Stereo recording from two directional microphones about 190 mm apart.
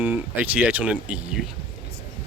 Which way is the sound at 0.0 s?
10° right (ahead or behind).